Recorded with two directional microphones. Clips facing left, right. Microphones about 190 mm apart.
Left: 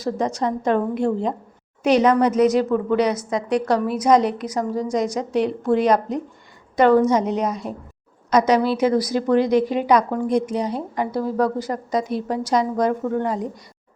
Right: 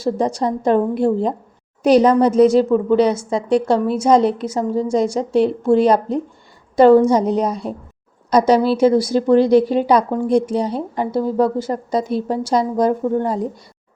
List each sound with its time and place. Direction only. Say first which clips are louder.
0.0 s a woman's voice: right 4 dB; 30° right (ahead or behind)